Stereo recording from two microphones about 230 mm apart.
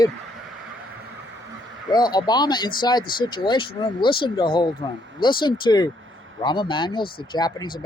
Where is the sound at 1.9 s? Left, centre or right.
Centre.